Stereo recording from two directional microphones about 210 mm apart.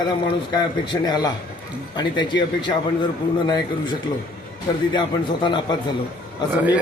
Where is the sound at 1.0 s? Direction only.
20° left (ahead or behind).